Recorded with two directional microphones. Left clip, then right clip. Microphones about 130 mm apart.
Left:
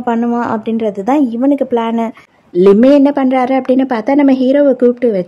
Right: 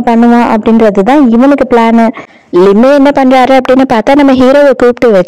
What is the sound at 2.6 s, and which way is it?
A man's voice, 50° right (ahead or behind).